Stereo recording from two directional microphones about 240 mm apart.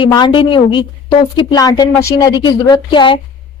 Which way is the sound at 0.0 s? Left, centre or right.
Centre.